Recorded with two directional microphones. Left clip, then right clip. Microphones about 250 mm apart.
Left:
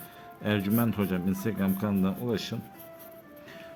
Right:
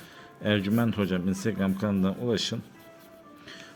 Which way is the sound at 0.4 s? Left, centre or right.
Centre.